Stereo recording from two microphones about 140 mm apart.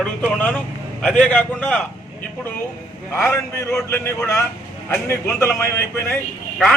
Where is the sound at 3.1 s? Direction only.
20° left (ahead or behind).